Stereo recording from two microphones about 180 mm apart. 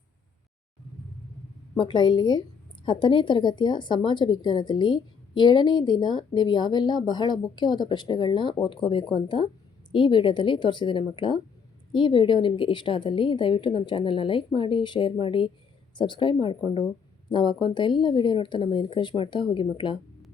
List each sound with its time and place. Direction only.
1.8 s a woman's voice: 25° left (ahead or behind)